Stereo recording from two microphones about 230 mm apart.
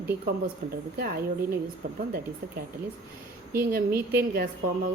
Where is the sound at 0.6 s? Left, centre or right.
Right.